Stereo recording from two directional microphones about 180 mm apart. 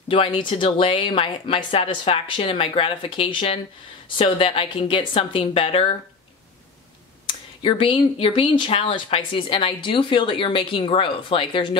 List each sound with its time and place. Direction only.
0.1 s a woman's voice: 30° left (ahead or behind)
7.2 s speech: 30° left (ahead or behind)